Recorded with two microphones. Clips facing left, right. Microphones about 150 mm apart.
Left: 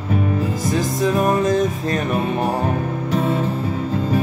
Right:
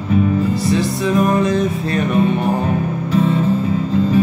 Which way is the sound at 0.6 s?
45° left (ahead or behind).